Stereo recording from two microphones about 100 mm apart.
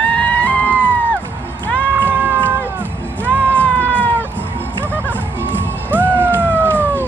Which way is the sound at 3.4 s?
15° left (ahead or behind).